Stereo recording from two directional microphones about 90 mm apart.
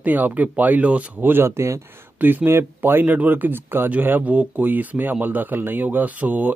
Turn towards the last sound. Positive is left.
turn(degrees=-15)  # may be behind; listen again after turning